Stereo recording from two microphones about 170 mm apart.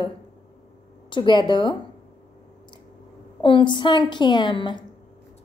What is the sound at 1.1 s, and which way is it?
Speech, 25° left (ahead or behind).